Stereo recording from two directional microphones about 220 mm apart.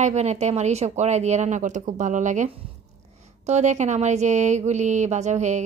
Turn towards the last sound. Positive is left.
turn(degrees=-30)  # may be behind; listen again after turning